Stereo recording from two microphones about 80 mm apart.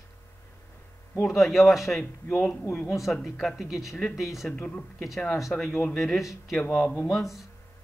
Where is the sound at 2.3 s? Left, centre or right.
Left.